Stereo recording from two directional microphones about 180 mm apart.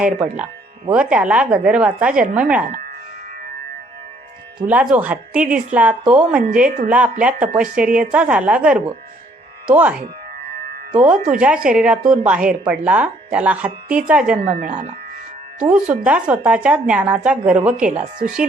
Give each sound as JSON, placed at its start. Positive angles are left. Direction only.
{"t": 0.0, "sound": "speech", "side_deg": -5}
{"t": 4.6, "sound": "speech", "side_deg": -5}
{"t": 6.7, "sound": "speech", "side_deg": -45}
{"t": 6.9, "sound": "speech", "side_deg": -5}
{"t": 10.9, "sound": "speech", "side_deg": -5}
{"t": 14.5, "sound": "speech", "side_deg": -45}
{"t": 15.7, "sound": "speech", "side_deg": -5}
{"t": 18.0, "sound": "speech", "side_deg": -45}